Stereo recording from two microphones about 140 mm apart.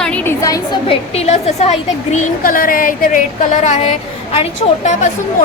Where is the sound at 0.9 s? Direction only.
45° left (ahead or behind).